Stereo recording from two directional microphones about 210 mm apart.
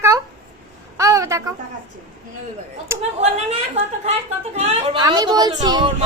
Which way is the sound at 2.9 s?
15° right (ahead or behind).